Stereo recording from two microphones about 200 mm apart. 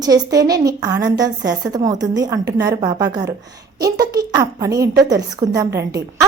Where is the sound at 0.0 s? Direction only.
20° right (ahead or behind).